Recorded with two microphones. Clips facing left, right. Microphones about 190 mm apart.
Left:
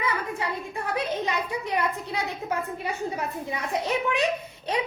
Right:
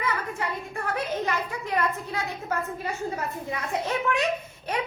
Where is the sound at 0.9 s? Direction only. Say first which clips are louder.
Left 1 dB; 15° left (ahead or behind).